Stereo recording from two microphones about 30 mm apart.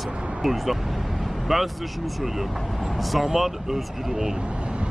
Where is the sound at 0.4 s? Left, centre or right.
Centre.